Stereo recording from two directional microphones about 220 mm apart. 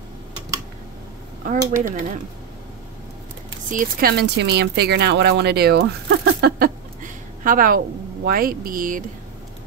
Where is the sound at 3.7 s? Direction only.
45° right (ahead or behind).